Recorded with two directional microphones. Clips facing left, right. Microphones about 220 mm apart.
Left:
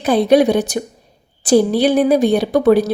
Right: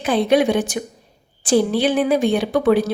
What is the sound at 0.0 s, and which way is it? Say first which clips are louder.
A woman's voice: left 4 dB; 40° left (ahead or behind).